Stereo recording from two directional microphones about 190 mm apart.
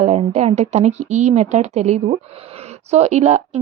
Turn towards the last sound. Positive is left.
turn(degrees=-35)  # may be behind; listen again after turning